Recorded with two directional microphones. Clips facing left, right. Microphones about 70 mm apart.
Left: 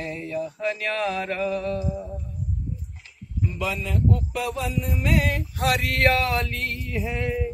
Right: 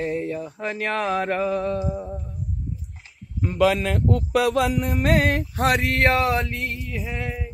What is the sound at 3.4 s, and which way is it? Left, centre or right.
Music, right.